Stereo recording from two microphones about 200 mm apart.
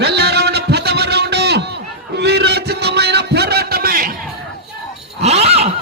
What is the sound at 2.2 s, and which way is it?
Music, 55° right (ahead or behind).